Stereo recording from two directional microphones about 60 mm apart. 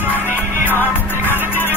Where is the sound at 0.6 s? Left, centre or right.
Left.